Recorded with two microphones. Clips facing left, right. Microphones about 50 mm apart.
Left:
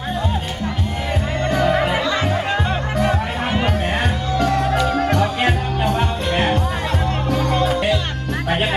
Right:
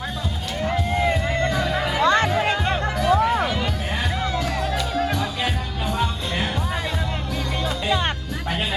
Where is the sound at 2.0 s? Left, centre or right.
Right.